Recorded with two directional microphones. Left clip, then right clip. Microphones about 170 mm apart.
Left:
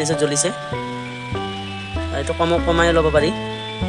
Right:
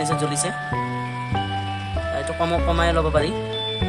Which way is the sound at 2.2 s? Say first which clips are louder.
Left 5 dB; 35° left (ahead or behind).